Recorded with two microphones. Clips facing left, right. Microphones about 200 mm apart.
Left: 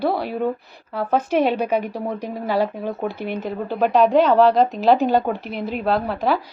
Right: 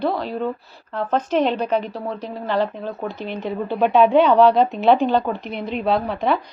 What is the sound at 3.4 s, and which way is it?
A woman's voice, centre (ahead or behind).